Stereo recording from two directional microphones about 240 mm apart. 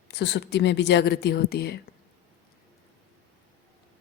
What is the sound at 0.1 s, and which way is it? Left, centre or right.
A woman's voice, left.